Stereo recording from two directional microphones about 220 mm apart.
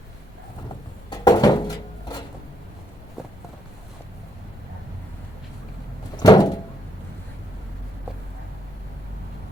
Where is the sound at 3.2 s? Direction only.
Centre (ahead or behind).